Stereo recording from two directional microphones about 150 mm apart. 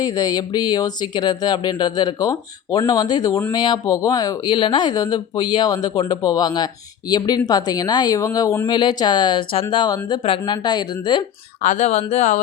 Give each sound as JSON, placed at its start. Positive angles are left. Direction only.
{"t": 0.0, "sound": "speech", "side_deg": 25}
{"t": 11.6, "sound": "speech", "side_deg": 55}